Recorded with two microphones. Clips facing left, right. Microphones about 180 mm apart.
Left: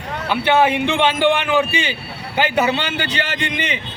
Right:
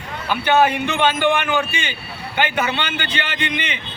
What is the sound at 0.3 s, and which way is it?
A man's voice, 25° left (ahead or behind).